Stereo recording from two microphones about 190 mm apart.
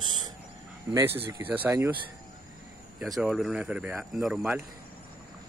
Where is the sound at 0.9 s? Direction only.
10° right (ahead or behind).